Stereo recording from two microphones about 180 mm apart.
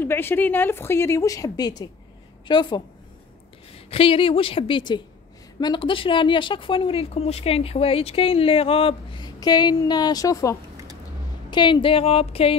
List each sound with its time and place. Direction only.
0.0 s a woman's voice: 10° left (ahead or behind); by 12.5 s 35° left (ahead or behind)